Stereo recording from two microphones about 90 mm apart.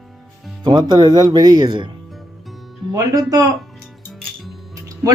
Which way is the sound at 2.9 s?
40° right (ahead or behind).